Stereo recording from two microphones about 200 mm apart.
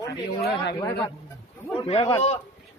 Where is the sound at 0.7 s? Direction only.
20° left (ahead or behind).